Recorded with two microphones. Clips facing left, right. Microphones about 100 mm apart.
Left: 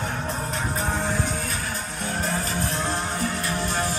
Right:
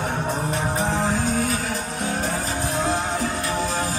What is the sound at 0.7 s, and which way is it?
Music, 90° right.